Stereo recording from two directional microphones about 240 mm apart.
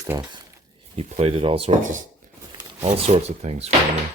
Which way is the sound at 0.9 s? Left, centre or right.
Right.